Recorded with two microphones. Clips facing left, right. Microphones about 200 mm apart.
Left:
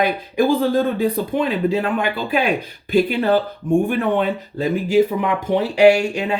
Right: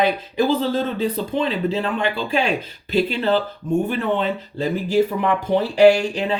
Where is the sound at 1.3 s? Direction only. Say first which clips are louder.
Left 2 dB; 15° left (ahead or behind).